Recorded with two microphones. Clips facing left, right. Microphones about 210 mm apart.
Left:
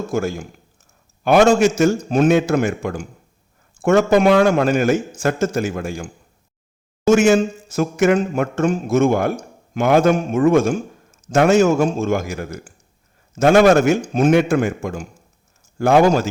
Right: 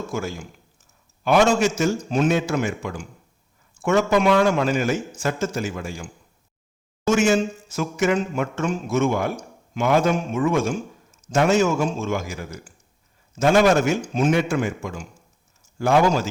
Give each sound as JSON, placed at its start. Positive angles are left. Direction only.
{"t": 0.1, "sound": "a man's voice", "side_deg": 50}
{"t": 7.1, "sound": "a man's voice", "side_deg": 55}